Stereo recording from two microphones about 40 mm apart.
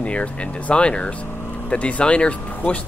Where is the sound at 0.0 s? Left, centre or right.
Left.